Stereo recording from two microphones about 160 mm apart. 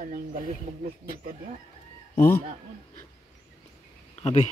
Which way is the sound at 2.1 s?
65° left (ahead or behind).